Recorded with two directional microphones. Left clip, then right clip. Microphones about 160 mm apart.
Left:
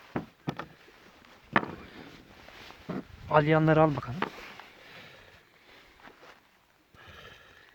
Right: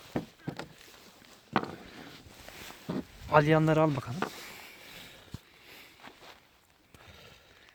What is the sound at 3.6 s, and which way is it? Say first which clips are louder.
Speech: left 3 dB; 15° left (ahead or behind).